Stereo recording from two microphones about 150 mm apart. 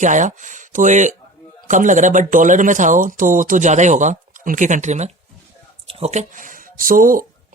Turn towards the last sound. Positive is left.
turn(degrees=-65)  # may be behind; listen again after turning